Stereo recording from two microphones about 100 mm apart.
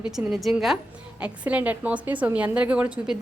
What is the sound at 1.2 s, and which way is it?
A woman's voice, 15° right (ahead or behind).